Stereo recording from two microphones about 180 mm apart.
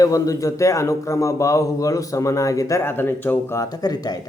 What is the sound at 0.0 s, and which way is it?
A man's voice, 20° left (ahead or behind).